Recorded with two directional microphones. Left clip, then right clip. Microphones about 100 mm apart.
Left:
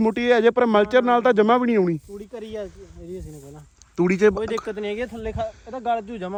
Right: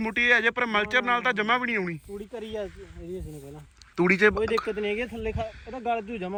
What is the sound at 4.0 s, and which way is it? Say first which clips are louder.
Speech: left 2 dB; 30° left (ahead or behind).